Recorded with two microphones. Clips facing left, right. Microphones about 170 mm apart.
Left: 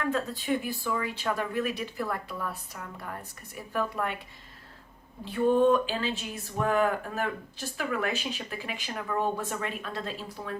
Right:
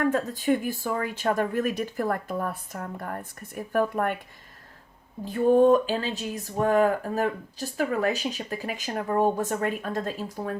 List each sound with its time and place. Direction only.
0.0 s speech: 50° right (ahead or behind)
5.2 s speech: 45° right (ahead or behind)